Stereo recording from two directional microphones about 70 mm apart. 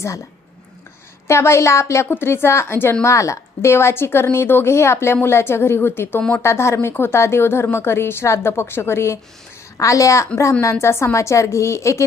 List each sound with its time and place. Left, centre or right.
1.3 s a woman's voice: left
3.0 s a woman's voice: left
6.4 s a woman's voice: left
9.7 s a woman's voice: left